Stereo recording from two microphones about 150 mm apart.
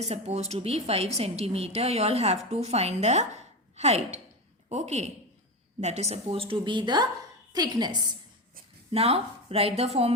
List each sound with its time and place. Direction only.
0.0 s a woman's voice: 45° right (ahead or behind); by 7.9 s 30° right (ahead or behind)
8.9 s a woman's voice: 40° right (ahead or behind)